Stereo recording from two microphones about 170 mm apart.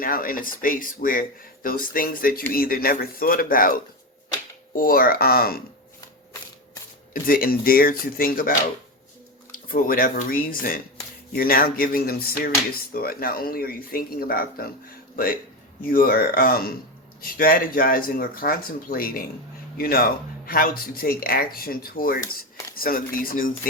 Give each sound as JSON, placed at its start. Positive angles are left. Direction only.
{"t": 0.0, "sound": "speech", "side_deg": 55}
{"t": 7.1, "sound": "speech", "side_deg": 60}
{"t": 9.6, "sound": "speech", "side_deg": 55}